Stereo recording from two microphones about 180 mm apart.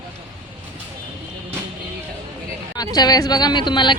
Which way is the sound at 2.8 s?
20° left (ahead or behind).